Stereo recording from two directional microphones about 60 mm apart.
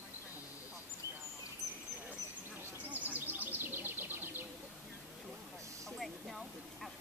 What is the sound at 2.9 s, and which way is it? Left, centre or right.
Bird, right.